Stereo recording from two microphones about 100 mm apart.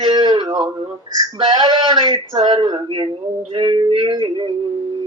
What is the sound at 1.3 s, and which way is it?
Speech, 50° right (ahead or behind).